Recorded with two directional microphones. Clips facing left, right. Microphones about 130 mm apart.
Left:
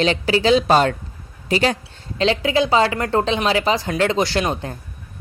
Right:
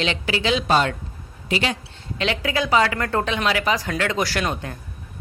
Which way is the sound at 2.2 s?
30° left (ahead or behind).